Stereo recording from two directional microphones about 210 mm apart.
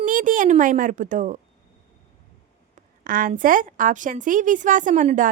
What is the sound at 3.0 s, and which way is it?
A woman's voice, 40° right (ahead or behind).